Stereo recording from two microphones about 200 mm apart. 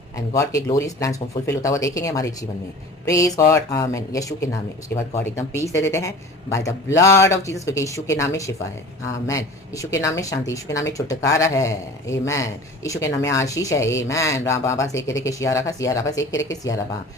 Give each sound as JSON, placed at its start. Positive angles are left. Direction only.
{"t": 0.3, "sound": "speech", "side_deg": 15}